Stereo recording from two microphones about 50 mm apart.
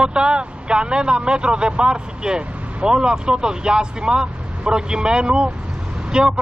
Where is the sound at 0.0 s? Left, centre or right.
Centre.